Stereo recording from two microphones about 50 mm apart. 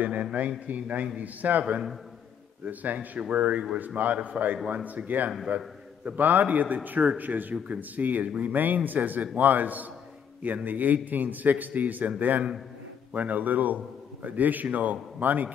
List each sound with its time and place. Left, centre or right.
0.0 s a man's voice: right
1.6 s a man's voice: right
2.6 s a man's voice: right